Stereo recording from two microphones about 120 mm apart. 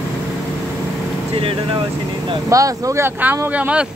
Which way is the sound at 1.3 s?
50° right (ahead or behind).